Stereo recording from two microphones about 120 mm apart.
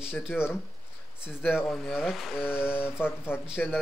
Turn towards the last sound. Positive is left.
turn(degrees=10)  # may be behind; listen again after turning